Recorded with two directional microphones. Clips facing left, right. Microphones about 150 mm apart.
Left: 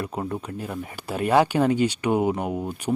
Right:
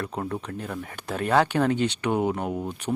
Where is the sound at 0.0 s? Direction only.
10° left (ahead or behind).